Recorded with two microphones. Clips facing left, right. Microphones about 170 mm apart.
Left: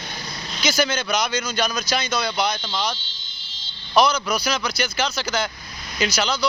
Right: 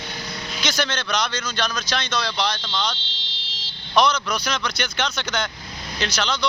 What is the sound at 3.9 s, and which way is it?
Speech, 5° left (ahead or behind).